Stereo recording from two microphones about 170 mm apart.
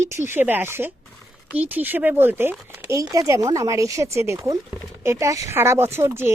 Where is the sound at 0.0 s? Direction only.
15° right (ahead or behind).